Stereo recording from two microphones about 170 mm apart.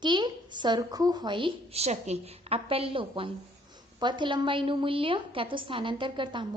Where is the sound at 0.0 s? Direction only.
25° right (ahead or behind).